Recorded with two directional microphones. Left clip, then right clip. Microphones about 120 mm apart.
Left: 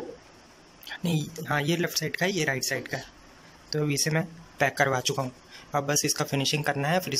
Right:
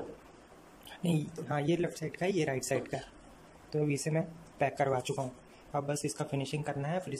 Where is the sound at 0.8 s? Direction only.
20° right (ahead or behind).